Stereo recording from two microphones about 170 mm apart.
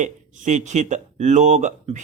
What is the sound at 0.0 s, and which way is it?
Speech, 45° right (ahead or behind).